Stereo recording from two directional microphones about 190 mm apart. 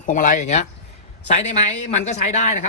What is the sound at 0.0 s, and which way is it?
Speech, 45° left (ahead or behind).